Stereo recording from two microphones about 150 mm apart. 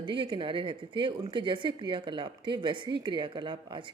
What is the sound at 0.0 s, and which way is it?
Speech, 35° right (ahead or behind).